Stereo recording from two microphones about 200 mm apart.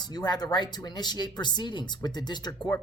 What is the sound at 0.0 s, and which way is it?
Speech, 20° left (ahead or behind).